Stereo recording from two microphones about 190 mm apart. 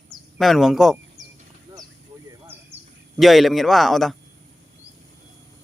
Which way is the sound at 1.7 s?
20° right (ahead or behind).